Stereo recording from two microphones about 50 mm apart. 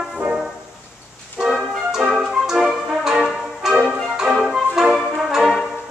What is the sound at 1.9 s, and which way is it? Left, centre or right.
Music, centre.